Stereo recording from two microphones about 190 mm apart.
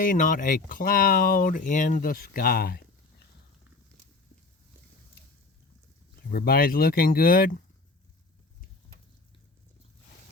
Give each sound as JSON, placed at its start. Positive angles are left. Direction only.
{"t": 0.0, "sound": "speech", "side_deg": 45}
{"t": 6.3, "sound": "speech", "side_deg": 50}